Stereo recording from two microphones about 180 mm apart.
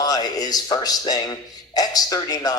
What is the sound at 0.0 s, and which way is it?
Speech, 20° left (ahead or behind).